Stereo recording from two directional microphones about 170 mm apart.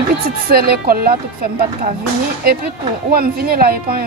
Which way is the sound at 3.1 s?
65° right (ahead or behind).